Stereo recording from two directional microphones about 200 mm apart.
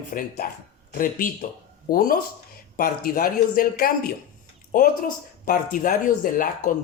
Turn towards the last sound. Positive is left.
turn(degrees=45)  # may be behind; listen again after turning